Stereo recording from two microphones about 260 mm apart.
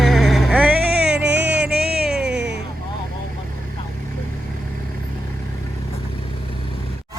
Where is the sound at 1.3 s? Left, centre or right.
Right.